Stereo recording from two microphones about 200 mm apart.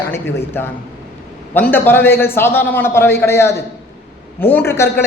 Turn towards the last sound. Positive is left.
turn(degrees=15)  # may be behind; listen again after turning